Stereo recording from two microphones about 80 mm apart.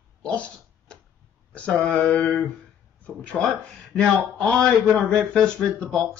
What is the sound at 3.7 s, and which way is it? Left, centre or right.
A man's voice, centre.